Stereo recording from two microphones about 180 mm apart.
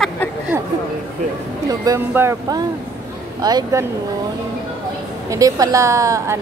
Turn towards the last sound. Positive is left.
turn(degrees=-15)  # may be behind; listen again after turning